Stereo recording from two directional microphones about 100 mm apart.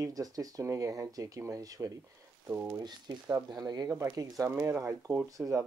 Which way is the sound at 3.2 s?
30° right (ahead or behind).